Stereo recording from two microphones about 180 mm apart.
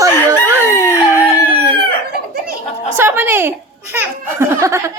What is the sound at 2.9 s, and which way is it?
A child's voice, 15° right (ahead or behind).